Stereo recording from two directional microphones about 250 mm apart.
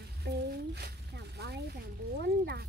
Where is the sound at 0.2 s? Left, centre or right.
Right.